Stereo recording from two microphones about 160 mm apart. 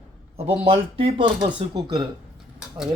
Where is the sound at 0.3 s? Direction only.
35° right (ahead or behind).